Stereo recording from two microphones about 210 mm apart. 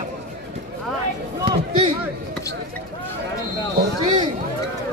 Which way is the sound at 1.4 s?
25° right (ahead or behind).